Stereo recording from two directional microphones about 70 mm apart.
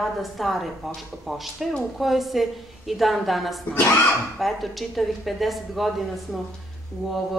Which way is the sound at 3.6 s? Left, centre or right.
Left.